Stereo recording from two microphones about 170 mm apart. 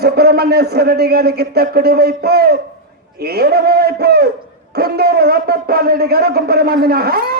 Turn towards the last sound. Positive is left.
turn(degrees=-65)  # may be behind; listen again after turning